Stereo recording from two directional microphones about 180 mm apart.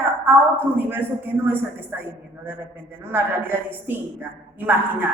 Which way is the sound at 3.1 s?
10° right (ahead or behind).